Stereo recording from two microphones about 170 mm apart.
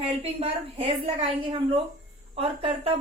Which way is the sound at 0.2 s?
35° right (ahead or behind).